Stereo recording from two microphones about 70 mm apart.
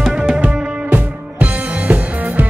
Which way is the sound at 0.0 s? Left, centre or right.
Centre.